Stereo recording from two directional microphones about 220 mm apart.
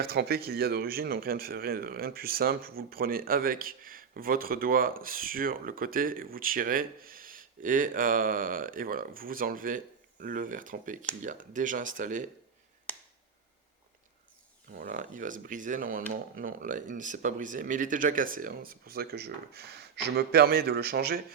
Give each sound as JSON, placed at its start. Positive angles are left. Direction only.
{"t": 0.0, "sound": "speech", "side_deg": -45}
{"t": 14.7, "sound": "speech", "side_deg": -40}